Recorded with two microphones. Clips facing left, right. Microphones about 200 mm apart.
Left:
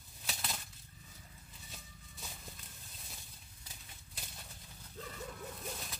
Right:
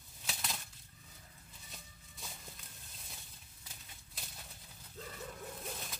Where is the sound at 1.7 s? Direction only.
Centre (ahead or behind).